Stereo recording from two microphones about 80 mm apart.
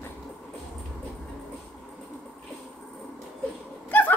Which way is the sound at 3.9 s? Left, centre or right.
Left.